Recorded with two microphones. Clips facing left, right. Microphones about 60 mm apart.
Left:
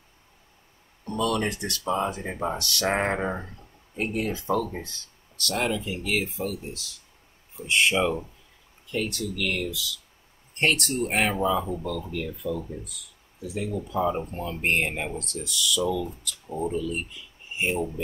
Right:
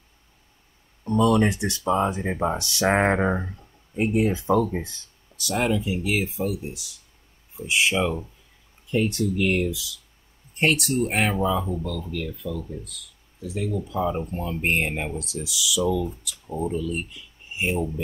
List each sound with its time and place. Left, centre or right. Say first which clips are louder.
1.0 s speech: right 6 dB; right; by 8.3 s centre
8.9 s speech: right 6 dB; right
10.5 s speech: right 2 dB; centre